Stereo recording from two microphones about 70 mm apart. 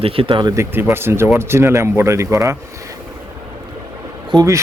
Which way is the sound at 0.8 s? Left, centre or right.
Right.